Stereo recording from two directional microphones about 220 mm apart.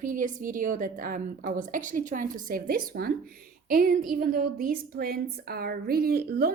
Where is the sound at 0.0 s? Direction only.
35° right (ahead or behind).